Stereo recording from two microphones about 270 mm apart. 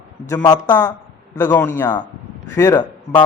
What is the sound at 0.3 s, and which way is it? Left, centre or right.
A man's voice, centre.